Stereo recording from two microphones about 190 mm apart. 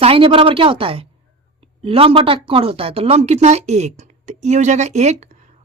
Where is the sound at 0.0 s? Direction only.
30° right (ahead or behind).